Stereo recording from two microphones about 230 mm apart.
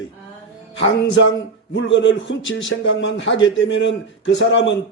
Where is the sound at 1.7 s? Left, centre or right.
Left.